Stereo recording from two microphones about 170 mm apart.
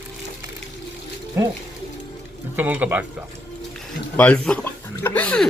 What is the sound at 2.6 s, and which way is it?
Speech, 10° right (ahead or behind).